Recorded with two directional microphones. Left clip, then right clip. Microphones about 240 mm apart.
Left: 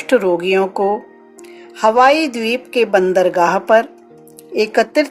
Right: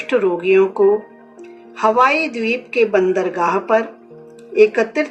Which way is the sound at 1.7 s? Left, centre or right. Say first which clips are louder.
Left 3 dB; left.